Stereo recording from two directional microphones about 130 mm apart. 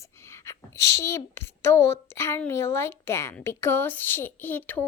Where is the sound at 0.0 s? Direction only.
20° left (ahead or behind).